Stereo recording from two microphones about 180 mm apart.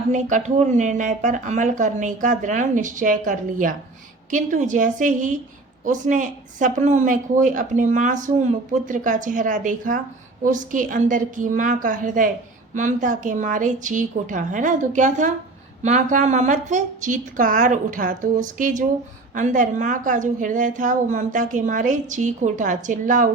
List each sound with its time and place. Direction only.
0.1 s a woman's voice: 45° right (ahead or behind)